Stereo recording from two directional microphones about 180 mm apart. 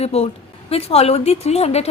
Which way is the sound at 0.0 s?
35° left (ahead or behind).